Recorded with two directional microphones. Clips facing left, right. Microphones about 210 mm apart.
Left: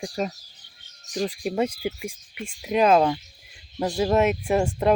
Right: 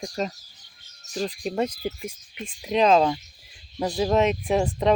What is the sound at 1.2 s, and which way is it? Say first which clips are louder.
Speech: left 1 dB; 10° left (ahead or behind).